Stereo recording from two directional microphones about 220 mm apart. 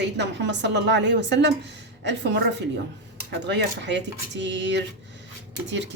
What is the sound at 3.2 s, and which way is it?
A woman's voice, 50° right (ahead or behind).